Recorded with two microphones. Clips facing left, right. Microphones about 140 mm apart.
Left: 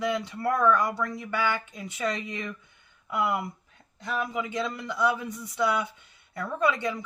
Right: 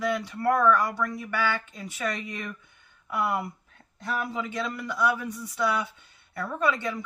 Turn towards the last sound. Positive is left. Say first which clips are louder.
# left 1 dB
turn(degrees=20)  # may be behind; listen again after turning